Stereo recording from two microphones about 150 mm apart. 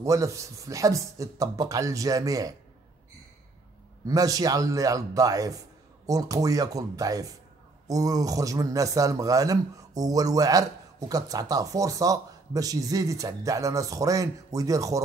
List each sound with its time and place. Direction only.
0.0 s a man's voice: 20° right (ahead or behind)
4.0 s a man's voice: 25° right (ahead or behind)